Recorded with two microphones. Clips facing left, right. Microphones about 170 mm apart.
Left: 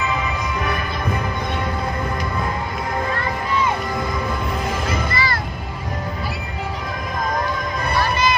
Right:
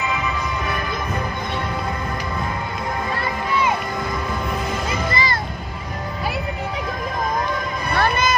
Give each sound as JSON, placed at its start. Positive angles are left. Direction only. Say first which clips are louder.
{"t": 5.1, "sound": "music", "louder": "even", "side_deg": -20}
{"t": 7.9, "sound": "music", "louder": "right 1 dB", "side_deg": -55}